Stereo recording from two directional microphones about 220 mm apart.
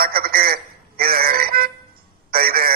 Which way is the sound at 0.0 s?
40° right (ahead or behind).